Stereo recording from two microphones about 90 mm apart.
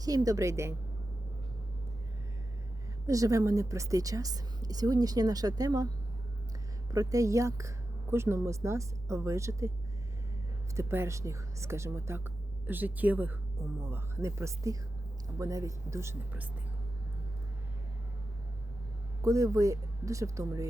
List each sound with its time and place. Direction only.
0.0 s a woman's voice: 40° right (ahead or behind)
3.1 s a woman's voice: 40° right (ahead or behind)
6.9 s a woman's voice: 40° right (ahead or behind)
10.8 s speech: 30° right (ahead or behind)
13.8 s a woman's voice: 30° right (ahead or behind)
19.2 s a woman's voice: 35° right (ahead or behind)